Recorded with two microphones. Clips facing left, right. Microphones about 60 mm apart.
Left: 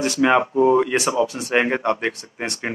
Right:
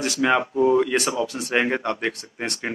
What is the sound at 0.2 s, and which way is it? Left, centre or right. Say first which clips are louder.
Speech: left 3 dB; centre.